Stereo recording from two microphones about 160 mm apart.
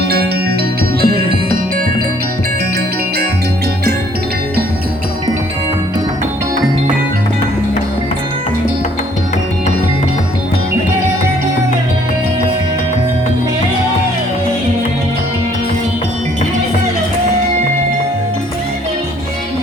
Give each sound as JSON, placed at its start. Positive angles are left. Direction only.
{"t": 1.0, "sound": "music", "side_deg": -75}